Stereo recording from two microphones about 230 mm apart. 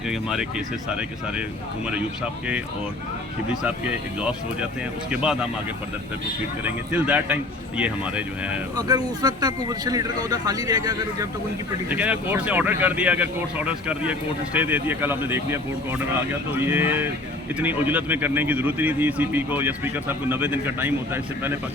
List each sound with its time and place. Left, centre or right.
0.1 s speech: centre
5.1 s speech: centre
6.7 s speech: centre
8.7 s speech: centre